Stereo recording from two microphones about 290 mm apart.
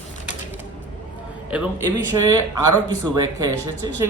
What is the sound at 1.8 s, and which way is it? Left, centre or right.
Speech, right.